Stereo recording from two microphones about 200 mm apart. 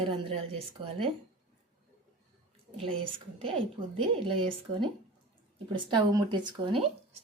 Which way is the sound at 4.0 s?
25° right (ahead or behind).